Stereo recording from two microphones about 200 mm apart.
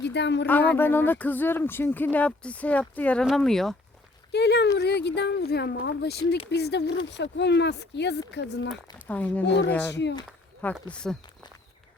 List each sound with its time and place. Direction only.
0.0 s speech: 60° left (ahead or behind)
0.4 s speech: 10° left (ahead or behind)
4.3 s speech: 55° left (ahead or behind)
9.0 s speech: 10° left (ahead or behind)
9.9 s speech: 60° left (ahead or behind)
10.9 s speech: 5° left (ahead or behind)